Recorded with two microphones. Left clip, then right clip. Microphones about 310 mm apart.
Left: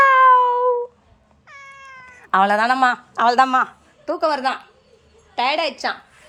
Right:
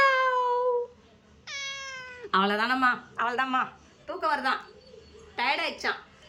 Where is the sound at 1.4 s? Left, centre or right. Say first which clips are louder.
Right 4 dB; centre.